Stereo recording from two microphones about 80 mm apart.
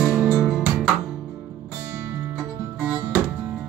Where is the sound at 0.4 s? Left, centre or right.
Centre.